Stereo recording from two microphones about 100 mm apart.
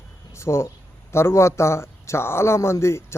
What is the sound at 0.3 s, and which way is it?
Speech, 25° left (ahead or behind).